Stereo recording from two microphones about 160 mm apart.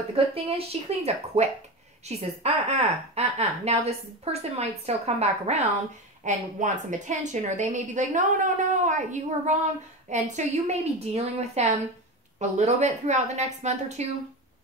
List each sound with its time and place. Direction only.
0.1 s a woman's voice: 35° right (ahead or behind)